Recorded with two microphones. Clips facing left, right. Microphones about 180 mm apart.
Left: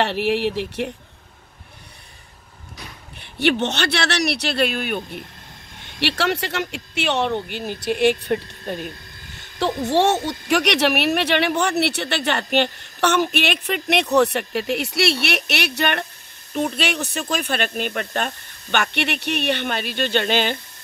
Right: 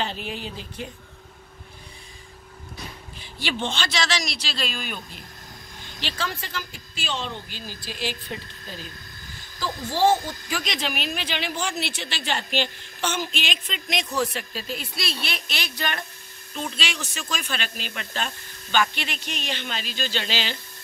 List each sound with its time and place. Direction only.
0.0 s speech: 75° left (ahead or behind)
3.2 s speech: 65° left (ahead or behind)